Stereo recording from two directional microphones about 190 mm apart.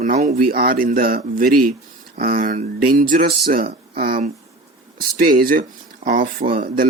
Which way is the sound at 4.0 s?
50° right (ahead or behind).